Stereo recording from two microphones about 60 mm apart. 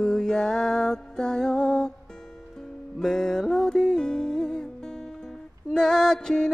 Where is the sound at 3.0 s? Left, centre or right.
Centre.